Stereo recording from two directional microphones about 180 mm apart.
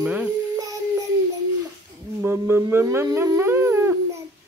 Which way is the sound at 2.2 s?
15° right (ahead or behind).